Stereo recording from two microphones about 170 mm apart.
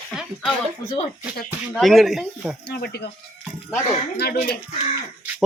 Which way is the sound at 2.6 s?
75° left (ahead or behind).